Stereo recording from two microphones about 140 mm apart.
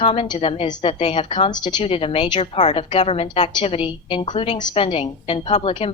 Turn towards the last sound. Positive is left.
turn(degrees=40)  # may be behind; listen again after turning